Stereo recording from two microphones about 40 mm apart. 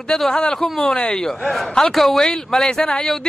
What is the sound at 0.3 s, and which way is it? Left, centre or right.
Speech, centre.